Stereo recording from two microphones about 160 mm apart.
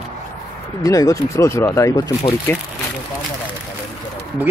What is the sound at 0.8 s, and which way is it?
Speech, 20° left (ahead or behind).